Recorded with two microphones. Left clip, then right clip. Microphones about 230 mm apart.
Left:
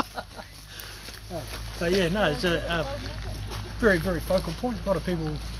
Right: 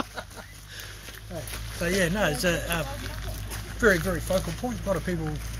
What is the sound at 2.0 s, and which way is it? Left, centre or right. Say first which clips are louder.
Speech: right 1 dB; right.